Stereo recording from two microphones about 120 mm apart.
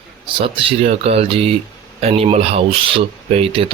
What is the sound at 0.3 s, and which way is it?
Speech, 45° right (ahead or behind).